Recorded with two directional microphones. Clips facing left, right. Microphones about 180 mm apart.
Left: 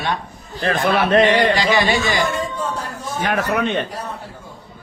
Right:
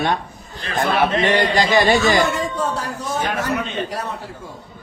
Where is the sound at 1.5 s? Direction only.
50° right (ahead or behind).